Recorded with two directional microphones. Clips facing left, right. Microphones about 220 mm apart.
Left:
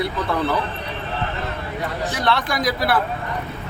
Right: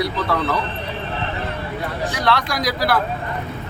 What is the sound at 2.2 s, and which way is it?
Speech, centre (ahead or behind).